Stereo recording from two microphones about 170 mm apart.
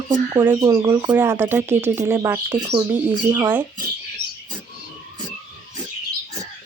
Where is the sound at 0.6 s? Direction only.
25° right (ahead or behind).